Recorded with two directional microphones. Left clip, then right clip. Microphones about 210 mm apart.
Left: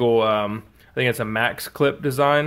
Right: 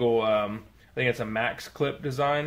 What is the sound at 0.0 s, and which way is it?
Speech, 45° left (ahead or behind).